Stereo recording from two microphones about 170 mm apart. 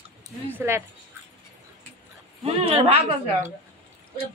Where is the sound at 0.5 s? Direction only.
15° right (ahead or behind).